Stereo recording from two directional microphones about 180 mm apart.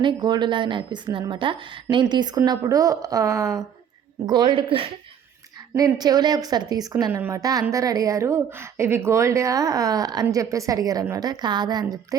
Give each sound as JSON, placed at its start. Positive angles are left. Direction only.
{"t": 0.0, "sound": "a woman's voice", "side_deg": -25}